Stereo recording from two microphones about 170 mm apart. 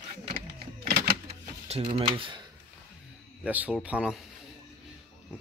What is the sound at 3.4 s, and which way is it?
Speech, 10° right (ahead or behind).